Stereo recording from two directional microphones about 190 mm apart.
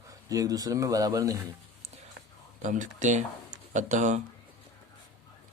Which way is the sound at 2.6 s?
40° right (ahead or behind).